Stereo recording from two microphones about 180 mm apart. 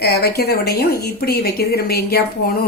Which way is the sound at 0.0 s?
60° left (ahead or behind).